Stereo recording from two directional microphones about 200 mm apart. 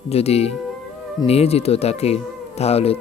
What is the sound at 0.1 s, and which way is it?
Speech, 30° left (ahead or behind).